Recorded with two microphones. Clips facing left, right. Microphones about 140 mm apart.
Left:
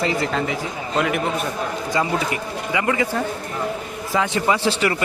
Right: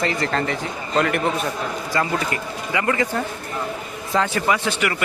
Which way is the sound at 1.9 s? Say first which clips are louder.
Left 1 dB; 15° left (ahead or behind).